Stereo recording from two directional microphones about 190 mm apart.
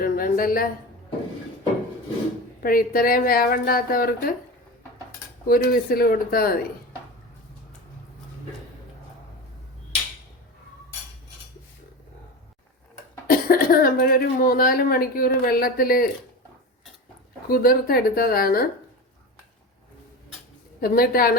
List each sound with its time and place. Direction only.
0.0 s a woman's voice: 50° left (ahead or behind)
2.6 s a woman's voice: 50° left (ahead or behind)
5.5 s a woman's voice: 50° left (ahead or behind)
13.2 s speech: 50° left (ahead or behind)
17.5 s a woman's voice: 50° left (ahead or behind)
20.8 s a woman's voice: 50° left (ahead or behind)